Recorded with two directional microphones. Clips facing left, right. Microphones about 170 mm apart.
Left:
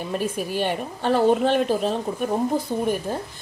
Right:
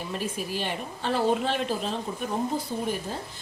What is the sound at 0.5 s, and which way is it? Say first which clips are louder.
Speech: left 6 dB; 50° left (ahead or behind).